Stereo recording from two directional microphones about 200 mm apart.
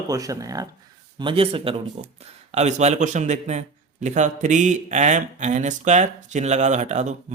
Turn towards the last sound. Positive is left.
turn(degrees=-35)  # may be behind; listen again after turning